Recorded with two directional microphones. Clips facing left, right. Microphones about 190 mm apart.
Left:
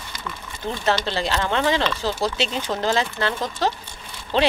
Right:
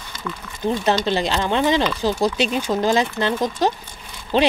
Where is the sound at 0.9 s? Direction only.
15° right (ahead or behind).